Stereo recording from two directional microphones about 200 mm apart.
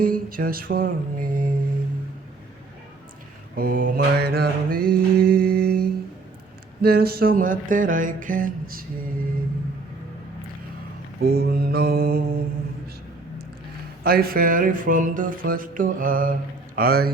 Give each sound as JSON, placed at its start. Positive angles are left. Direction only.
{"t": 0.0, "sound": "music", "side_deg": -45}
{"t": 3.6, "sound": "music", "side_deg": -45}
{"t": 5.3, "sound": "mantra", "side_deg": -50}
{"t": 6.8, "sound": "music", "side_deg": -50}
{"t": 11.3, "sound": "music", "side_deg": -50}
{"t": 14.0, "sound": "music", "side_deg": -50}